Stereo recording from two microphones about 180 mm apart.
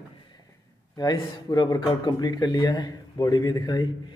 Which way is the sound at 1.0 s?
20° left (ahead or behind).